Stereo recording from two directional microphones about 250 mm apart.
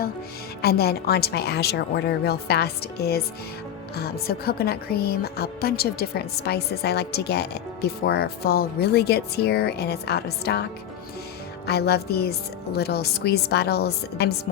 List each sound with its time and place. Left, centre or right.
0.6 s a woman's voice: left